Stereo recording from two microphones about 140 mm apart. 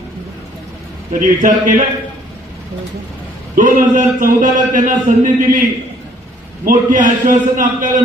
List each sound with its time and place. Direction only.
1.2 s a man's voice: 70° right (ahead or behind)
3.5 s a man's voice: 70° right (ahead or behind)
6.7 s a man's voice: 75° right (ahead or behind)